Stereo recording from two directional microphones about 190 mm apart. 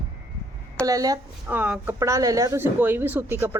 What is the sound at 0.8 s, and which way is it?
Speech, 20° right (ahead or behind).